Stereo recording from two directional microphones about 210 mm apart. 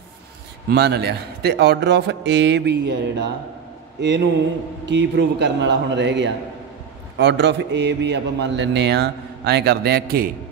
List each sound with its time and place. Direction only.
0.7 s a man's voice: 55° right (ahead or behind)
4.8 s a man's voice: 55° right (ahead or behind)